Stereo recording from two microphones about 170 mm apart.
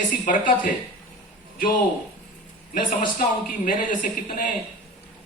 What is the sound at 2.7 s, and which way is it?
A man's voice, 55° left (ahead or behind).